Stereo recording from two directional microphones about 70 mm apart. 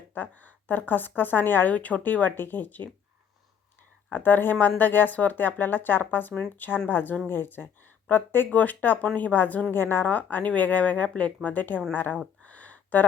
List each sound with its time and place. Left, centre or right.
0.1 s speech: left
4.1 s speech: left
12.4 s a sound: left